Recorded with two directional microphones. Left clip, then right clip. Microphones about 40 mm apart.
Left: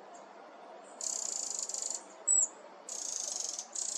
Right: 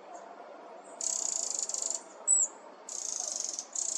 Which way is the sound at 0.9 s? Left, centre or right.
Right.